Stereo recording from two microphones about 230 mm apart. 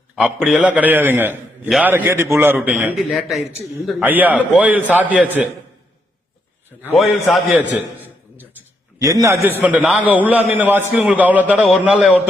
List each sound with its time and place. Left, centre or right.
0.2 s a man's voice: centre
6.8 s a man's voice: centre
9.0 s a man's voice: centre